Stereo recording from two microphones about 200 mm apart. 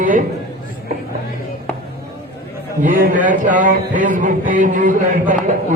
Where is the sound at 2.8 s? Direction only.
45° right (ahead or behind).